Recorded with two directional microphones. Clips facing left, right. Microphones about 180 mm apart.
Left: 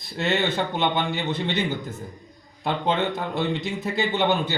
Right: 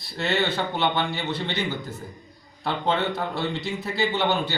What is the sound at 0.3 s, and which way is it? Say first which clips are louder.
Speech: left 1 dB; 20° left (ahead or behind).